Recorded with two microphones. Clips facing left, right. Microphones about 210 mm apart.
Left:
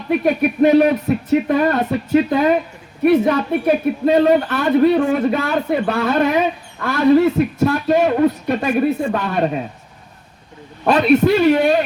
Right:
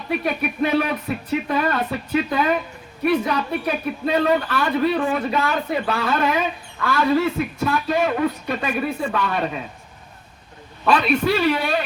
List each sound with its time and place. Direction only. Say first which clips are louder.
0.1 s speech: left 7 dB; 45° left (ahead or behind)
10.8 s speech: left 6 dB; 45° left (ahead or behind)